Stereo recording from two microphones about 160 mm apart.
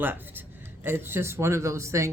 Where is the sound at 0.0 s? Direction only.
10° right (ahead or behind).